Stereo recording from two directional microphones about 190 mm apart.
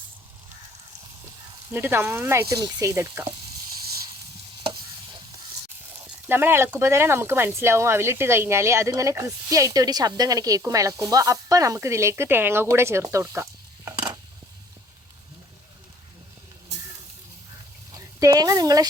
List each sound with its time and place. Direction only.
1.7 s speech: 10° right (ahead or behind)
4.6 s stir: 25° right (ahead or behind)
6.1 s speech: 10° right (ahead or behind)
17.9 s speech: 15° right (ahead or behind)